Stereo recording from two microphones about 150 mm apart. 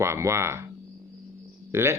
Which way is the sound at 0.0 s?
20° right (ahead or behind).